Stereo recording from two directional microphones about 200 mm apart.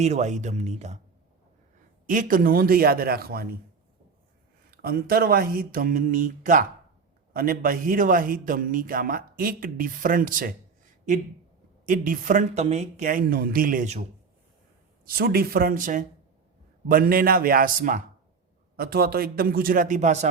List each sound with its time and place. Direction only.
0.0 s speech: 35° right (ahead or behind)
2.0 s a man's voice: 45° right (ahead or behind)
4.7 s a man's voice: 50° right (ahead or behind)
11.9 s a man's voice: 45° right (ahead or behind)
15.0 s a man's voice: 50° right (ahead or behind)